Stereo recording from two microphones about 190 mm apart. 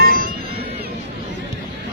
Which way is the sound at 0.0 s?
50° right (ahead or behind).